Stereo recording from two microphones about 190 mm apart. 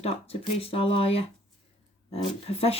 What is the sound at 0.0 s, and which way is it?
Speech, 30° left (ahead or behind).